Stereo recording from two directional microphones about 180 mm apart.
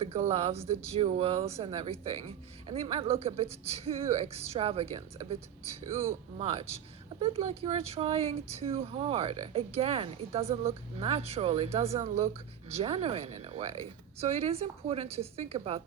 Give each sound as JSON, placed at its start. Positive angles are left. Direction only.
{"t": 0.0, "sound": "speech", "side_deg": -35}